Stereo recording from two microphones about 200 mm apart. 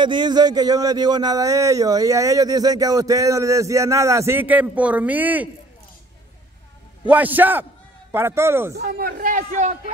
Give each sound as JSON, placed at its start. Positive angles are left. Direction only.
{"t": 0.0, "sound": "speech", "side_deg": -20}
{"t": 7.1, "sound": "speech", "side_deg": -10}
{"t": 8.7, "sound": "a man's voice", "side_deg": -50}